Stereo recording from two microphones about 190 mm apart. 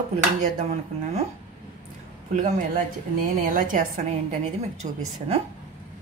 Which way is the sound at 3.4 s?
45° right (ahead or behind).